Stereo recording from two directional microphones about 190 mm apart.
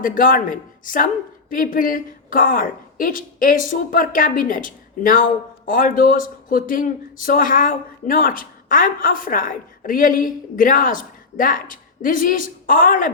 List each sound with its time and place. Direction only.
0.0 s speech: 45° left (ahead or behind)